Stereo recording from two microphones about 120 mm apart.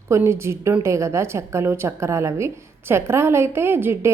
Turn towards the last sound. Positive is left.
turn(degrees=-20)  # may be behind; listen again after turning